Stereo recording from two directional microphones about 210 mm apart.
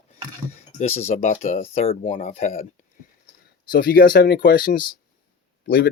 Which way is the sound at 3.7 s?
45° left (ahead or behind).